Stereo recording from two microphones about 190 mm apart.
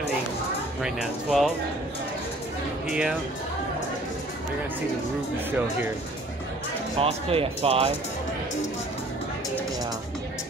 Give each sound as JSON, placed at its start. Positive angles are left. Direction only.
{"t": 0.8, "sound": "speech", "side_deg": -5}
{"t": 2.9, "sound": "speech", "side_deg": -5}
{"t": 7.0, "sound": "speech", "side_deg": -30}